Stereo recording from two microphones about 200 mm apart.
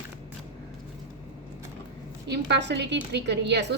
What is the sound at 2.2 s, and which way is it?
A woman's voice, 60° right (ahead or behind).